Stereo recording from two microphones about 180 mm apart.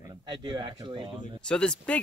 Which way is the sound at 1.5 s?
5° left (ahead or behind).